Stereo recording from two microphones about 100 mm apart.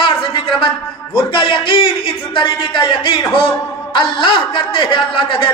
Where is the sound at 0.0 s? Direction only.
60° left (ahead or behind).